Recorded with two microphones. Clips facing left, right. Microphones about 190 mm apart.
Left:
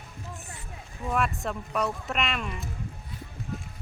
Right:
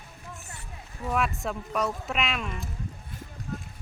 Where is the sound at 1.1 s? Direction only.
Centre (ahead or behind).